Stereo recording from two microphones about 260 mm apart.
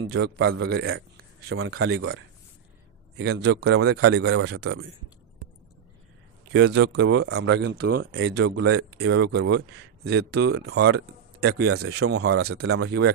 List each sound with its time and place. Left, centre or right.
0.0 s speech: right
6.5 s speech: right
12.4 s speech: right
12.7 s speech: right